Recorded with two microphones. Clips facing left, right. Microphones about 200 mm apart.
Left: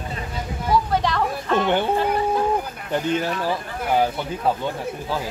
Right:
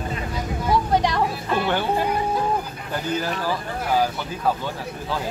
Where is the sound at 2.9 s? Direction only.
25° left (ahead or behind).